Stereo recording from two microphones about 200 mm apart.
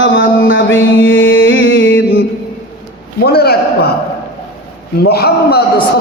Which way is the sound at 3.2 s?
50° left (ahead or behind).